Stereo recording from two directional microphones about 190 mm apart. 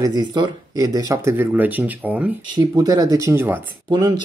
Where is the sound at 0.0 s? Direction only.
20° right (ahead or behind).